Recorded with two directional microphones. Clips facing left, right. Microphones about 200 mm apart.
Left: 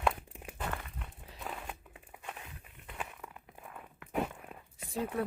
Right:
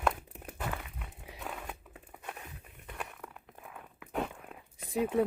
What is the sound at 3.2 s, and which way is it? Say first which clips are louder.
Crumpling: right 1 dB; centre (ahead or behind).